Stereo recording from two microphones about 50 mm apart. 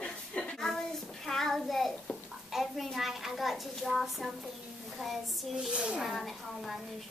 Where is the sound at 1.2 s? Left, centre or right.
Centre.